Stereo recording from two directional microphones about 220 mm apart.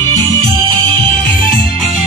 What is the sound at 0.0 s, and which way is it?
Music, 20° right (ahead or behind).